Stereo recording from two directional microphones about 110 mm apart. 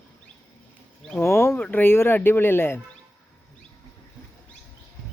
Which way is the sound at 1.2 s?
20° left (ahead or behind).